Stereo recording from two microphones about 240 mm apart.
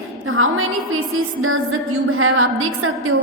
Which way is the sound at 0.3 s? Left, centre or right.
Right.